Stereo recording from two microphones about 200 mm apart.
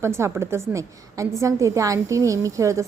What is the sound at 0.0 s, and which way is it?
A woman's voice, 15° right (ahead or behind).